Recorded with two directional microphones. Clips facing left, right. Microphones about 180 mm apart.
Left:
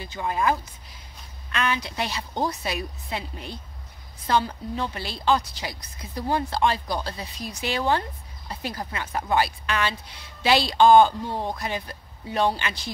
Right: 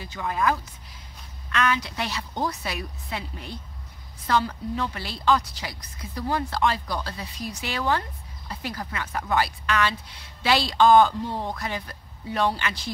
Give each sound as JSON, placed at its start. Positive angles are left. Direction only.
{"t": 0.0, "sound": "a woman's voice", "side_deg": 25}
{"t": 11.1, "sound": "a woman's voice", "side_deg": 15}